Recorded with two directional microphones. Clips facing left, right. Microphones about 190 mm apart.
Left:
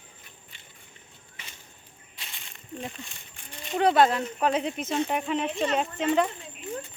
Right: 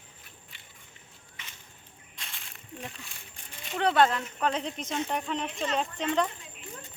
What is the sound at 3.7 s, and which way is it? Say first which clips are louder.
Speech: left 3 dB; 10° left (ahead or behind).